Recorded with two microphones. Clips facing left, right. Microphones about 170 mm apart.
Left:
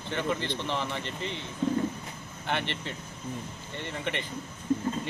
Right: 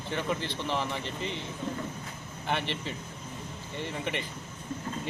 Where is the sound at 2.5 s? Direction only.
5° right (ahead or behind).